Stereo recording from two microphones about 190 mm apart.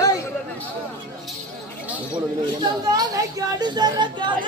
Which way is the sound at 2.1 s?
20° right (ahead or behind).